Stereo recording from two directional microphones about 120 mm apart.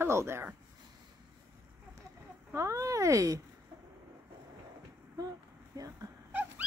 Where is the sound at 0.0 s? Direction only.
20° right (ahead or behind).